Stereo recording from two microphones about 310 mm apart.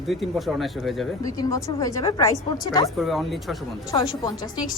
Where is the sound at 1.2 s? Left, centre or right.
Centre.